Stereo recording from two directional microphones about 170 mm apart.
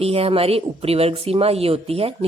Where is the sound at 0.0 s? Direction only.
35° right (ahead or behind).